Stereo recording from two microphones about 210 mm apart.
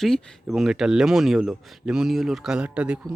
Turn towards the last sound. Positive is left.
turn(degrees=-5)  # may be behind; listen again after turning